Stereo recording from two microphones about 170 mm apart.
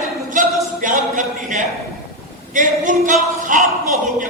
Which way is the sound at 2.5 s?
50° right (ahead or behind).